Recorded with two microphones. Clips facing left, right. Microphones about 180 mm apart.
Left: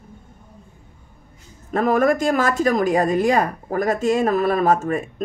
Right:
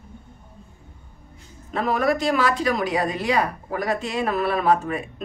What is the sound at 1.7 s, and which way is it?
A woman's voice, 45° left (ahead or behind).